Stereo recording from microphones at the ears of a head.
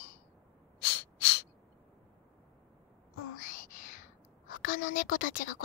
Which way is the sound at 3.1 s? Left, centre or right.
Left.